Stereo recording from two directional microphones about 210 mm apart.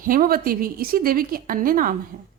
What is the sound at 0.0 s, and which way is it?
A woman's voice, 40° right (ahead or behind).